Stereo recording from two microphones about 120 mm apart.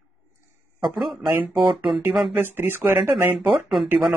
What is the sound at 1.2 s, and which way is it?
Speech, 20° right (ahead or behind).